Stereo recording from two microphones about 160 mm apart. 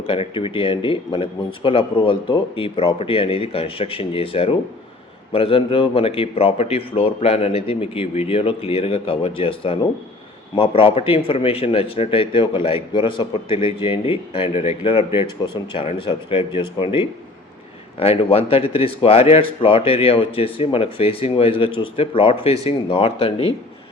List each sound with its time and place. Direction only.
0.1 s a man's voice: 35° left (ahead or behind)